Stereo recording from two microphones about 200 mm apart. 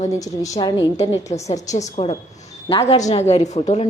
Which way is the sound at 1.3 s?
35° left (ahead or behind).